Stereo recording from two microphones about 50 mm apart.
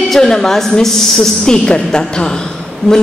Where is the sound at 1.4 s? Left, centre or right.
Centre.